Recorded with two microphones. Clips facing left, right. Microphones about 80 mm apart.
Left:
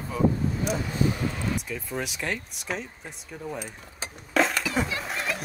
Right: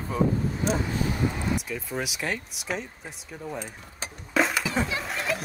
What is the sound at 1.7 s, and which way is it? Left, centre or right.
Speech, centre.